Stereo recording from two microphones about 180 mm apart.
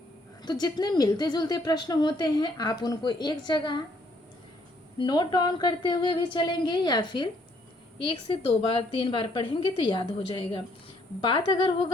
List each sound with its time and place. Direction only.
0.4 s speech: 20° left (ahead or behind)
4.9 s speech: 25° left (ahead or behind)